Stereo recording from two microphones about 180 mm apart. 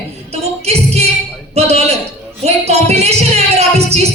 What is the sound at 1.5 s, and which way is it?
Speech, 35° right (ahead or behind).